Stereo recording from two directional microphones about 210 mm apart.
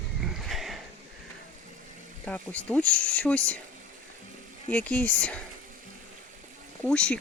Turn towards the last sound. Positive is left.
turn(degrees=5)  # may be behind; listen again after turning